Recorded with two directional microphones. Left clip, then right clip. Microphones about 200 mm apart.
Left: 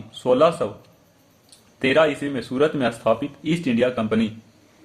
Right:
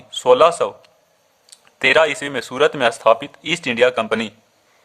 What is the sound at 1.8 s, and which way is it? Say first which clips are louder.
Speech: right 4 dB; 40° right (ahead or behind).